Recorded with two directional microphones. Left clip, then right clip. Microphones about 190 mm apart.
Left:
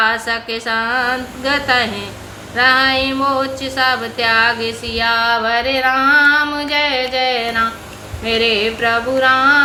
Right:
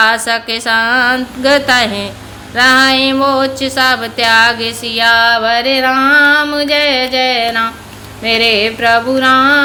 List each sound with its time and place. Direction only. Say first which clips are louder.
0.0 s music: right 5 dB; 50° right (ahead or behind)